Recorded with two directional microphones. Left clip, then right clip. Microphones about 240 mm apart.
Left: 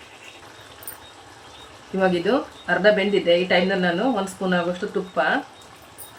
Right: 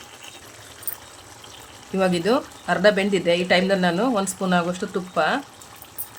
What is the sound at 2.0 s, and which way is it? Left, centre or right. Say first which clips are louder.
Speech: even; right.